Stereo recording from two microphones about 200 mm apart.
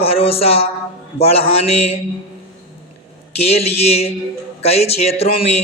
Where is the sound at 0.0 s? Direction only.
30° left (ahead or behind).